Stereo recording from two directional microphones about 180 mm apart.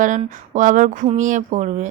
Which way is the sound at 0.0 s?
45° right (ahead or behind).